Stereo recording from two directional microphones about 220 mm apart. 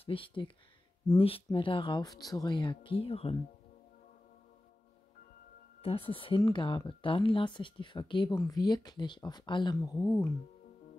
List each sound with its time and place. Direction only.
0.0 s speech: 25° left (ahead or behind)
5.8 s speech: 25° left (ahead or behind)